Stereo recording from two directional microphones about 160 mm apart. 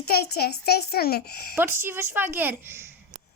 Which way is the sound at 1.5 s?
15° right (ahead or behind).